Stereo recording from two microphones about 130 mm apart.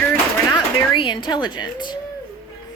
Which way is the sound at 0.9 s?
35° left (ahead or behind).